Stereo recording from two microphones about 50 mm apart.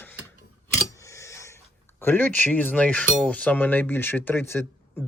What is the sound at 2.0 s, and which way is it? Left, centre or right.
Speech, left.